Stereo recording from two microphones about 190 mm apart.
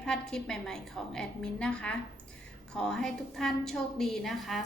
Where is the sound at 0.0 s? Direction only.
5° left (ahead or behind).